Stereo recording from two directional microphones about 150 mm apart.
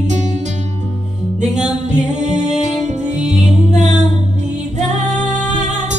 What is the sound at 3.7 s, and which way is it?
Music, 50° right (ahead or behind).